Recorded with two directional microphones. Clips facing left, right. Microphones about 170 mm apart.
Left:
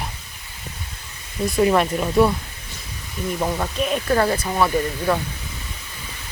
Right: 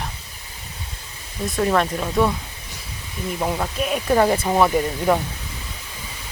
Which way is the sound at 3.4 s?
5° right (ahead or behind).